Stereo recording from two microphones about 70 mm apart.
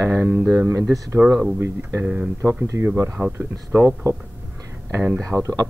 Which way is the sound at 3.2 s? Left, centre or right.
Right.